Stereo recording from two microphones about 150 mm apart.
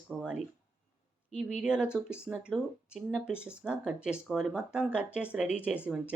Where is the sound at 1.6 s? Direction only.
5° right (ahead or behind).